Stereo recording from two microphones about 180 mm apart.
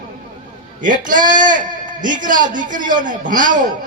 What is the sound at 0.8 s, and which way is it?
A man's voice, 45° right (ahead or behind).